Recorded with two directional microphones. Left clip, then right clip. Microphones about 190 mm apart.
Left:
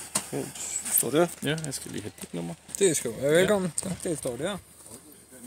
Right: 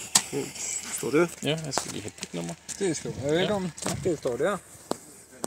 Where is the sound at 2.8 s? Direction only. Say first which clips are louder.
Left 5 dB; 35° left (ahead or behind).